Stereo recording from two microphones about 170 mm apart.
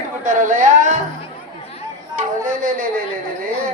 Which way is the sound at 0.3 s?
50° right (ahead or behind).